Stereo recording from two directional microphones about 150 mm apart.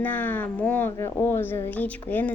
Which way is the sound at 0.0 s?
10° left (ahead or behind).